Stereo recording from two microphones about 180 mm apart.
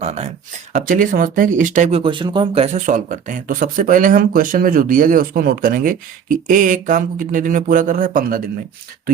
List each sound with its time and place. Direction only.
0.0 s speech: 40° right (ahead or behind)
2.7 s speech: 45° right (ahead or behind)